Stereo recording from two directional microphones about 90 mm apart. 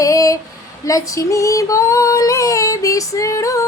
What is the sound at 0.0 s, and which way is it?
Female singing, 40° left (ahead or behind).